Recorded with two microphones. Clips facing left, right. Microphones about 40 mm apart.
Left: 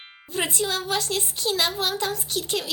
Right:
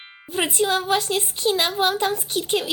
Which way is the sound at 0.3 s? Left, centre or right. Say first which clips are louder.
Right 5 dB; centre.